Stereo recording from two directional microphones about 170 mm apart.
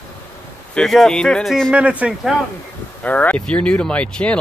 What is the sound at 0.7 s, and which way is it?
Speech, centre (ahead or behind).